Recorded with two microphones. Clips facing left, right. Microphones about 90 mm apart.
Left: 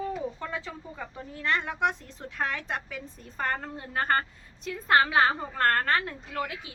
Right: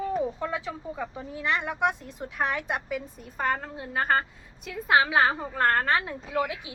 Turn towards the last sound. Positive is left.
turn(degrees=-15)  # may be behind; listen again after turning